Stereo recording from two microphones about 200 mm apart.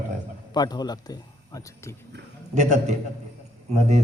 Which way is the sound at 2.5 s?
35° right (ahead or behind).